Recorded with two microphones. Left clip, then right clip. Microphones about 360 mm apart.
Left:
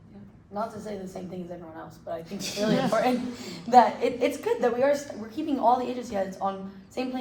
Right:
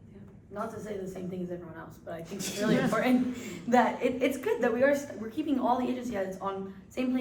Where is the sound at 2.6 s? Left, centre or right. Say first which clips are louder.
Left 3 dB; centre.